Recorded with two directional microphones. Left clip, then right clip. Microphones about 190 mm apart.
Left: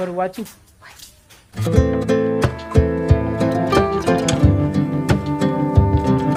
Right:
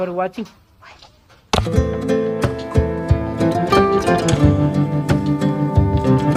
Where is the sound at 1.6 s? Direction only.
Centre (ahead or behind).